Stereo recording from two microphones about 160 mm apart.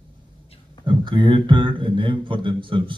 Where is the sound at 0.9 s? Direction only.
30° right (ahead or behind).